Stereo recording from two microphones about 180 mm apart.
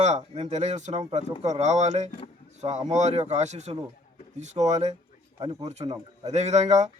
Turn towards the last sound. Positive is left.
turn(degrees=-40)  # may be behind; listen again after turning